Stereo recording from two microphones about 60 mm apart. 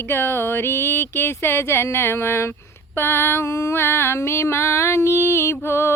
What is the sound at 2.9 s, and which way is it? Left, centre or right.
Female singing, left.